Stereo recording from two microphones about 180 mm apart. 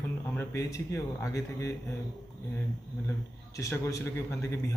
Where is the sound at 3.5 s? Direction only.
15° left (ahead or behind).